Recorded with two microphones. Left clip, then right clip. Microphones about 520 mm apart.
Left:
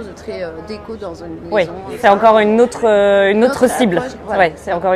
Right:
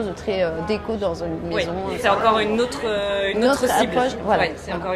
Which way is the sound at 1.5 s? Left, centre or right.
Left.